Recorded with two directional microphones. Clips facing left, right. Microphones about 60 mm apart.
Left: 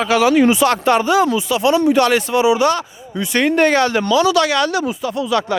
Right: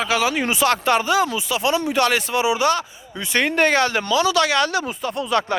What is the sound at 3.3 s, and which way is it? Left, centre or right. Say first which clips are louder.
A man's voice: left 4 dB; right.